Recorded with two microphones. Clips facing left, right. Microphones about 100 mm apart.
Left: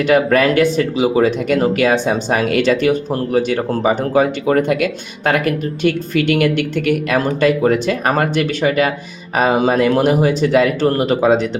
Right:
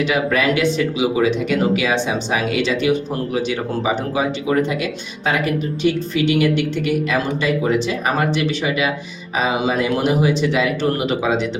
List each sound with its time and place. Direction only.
0.0 s speech: 50° left (ahead or behind)